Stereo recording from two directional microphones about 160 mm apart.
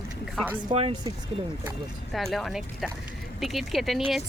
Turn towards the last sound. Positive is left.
turn(degrees=0)  # may be behind; listen again after turning